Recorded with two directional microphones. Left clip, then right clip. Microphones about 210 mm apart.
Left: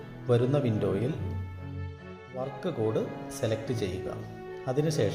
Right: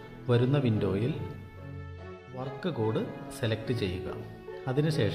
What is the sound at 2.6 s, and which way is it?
Speech, 35° right (ahead or behind).